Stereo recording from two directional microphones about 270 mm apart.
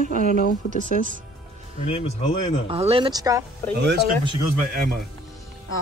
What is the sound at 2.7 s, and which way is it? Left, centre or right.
Speech, right.